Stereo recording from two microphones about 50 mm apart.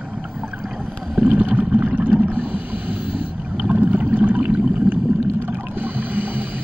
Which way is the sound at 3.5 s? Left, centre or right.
Right.